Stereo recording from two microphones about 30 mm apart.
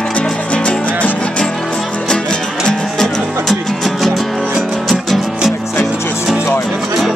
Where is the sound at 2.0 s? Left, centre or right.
Left.